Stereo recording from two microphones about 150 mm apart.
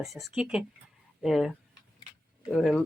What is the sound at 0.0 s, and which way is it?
Speech, centre (ahead or behind).